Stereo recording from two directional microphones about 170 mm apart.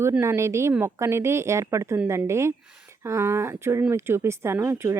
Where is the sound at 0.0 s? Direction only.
15° right (ahead or behind).